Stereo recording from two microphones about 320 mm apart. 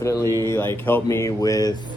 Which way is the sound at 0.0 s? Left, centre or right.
Centre.